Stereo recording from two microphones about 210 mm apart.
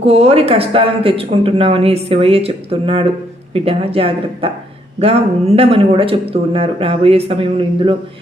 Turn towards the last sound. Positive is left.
turn(degrees=-25)  # may be behind; listen again after turning